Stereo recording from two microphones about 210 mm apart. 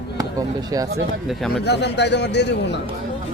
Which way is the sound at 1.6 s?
55° left (ahead or behind).